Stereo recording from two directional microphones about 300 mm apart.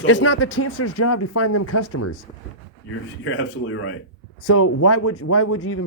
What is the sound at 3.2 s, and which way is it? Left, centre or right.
Speech, left.